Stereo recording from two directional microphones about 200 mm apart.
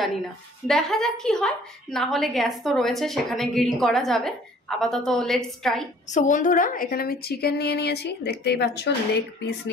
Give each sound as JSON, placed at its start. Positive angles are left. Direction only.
{"t": 0.7, "sound": "a woman's voice", "side_deg": 0}
{"t": 6.0, "sound": "a woman's voice", "side_deg": 40}